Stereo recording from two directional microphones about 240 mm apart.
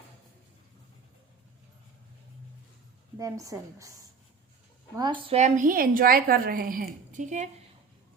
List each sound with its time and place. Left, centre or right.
3.2 s a woman's voice: centre
4.9 s a woman's voice: centre
5.4 s a woman's voice: right